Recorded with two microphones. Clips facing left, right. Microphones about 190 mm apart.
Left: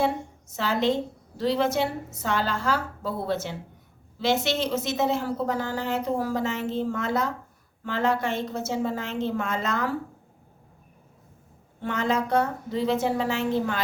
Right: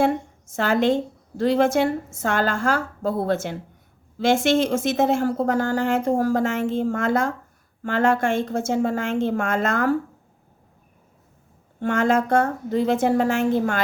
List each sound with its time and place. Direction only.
0.5 s speech: 50° right (ahead or behind)
11.8 s speech: 50° right (ahead or behind)